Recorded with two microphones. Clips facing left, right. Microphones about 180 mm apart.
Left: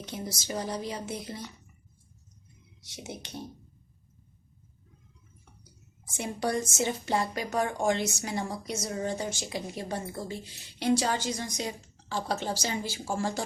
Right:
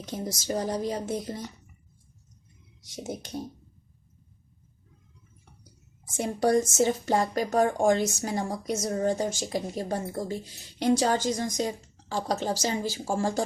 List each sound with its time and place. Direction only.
0.0 s speech: 45° right (ahead or behind)
2.8 s speech: 45° right (ahead or behind)
6.1 s speech: 45° right (ahead or behind)